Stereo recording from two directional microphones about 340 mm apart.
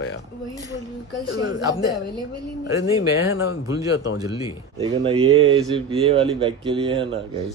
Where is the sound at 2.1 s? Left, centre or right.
Centre.